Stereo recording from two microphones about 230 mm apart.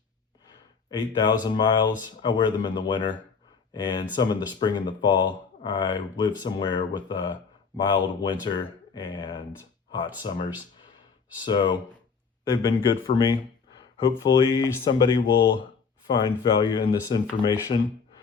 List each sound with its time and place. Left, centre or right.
0.9 s speech: centre
11.4 s speech: centre